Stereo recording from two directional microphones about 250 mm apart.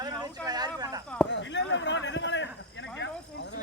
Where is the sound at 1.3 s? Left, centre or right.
Left.